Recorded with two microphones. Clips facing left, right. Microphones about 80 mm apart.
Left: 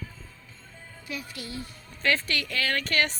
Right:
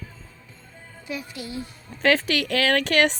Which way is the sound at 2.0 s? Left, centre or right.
Right.